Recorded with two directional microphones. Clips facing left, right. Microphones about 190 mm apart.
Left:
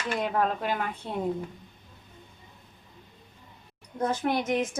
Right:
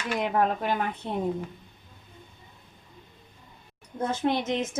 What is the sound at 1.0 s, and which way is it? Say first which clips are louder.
Speech: right 2 dB; 20° right (ahead or behind).